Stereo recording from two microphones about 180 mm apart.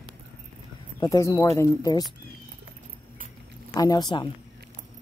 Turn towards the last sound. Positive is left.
turn(degrees=25)  # may be behind; listen again after turning